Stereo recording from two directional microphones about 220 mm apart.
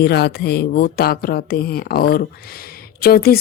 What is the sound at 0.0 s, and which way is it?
Speech, 50° left (ahead or behind).